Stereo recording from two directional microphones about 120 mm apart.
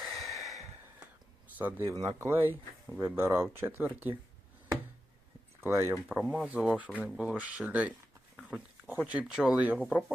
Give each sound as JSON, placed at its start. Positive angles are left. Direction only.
{"t": 0.0, "sound": "a sound", "side_deg": 0}
{"t": 1.5, "sound": "speech", "side_deg": -15}
{"t": 5.5, "sound": "speech", "side_deg": -20}
{"t": 6.1, "sound": "speech", "side_deg": -5}